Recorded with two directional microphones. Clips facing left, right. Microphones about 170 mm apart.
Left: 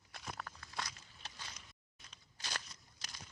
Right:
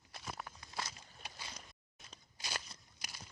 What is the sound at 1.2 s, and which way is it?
Vehicle, 10° right (ahead or behind).